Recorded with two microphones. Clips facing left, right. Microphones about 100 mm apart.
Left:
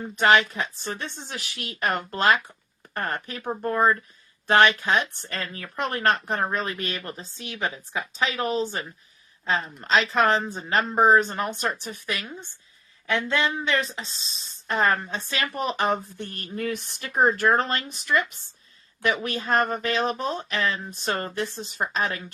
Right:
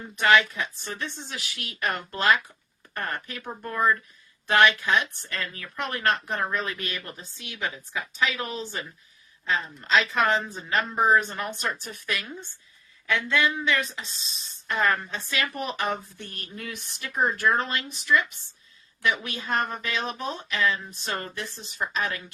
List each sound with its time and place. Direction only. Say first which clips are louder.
0.2 s speech: left 1 dB; 30° left (ahead or behind)
13.1 s speech: even; 30° left (ahead or behind)